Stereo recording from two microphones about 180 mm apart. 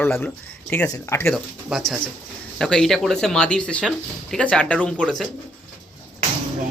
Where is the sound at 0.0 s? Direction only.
10° left (ahead or behind).